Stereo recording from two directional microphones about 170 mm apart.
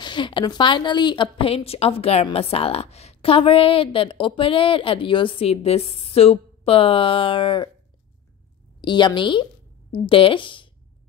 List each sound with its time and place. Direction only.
0.0 s a woman's voice: 25° left (ahead or behind)
8.8 s a woman's voice: 30° left (ahead or behind)